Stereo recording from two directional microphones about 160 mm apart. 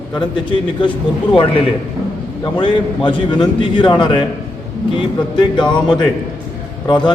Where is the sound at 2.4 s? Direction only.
30° left (ahead or behind).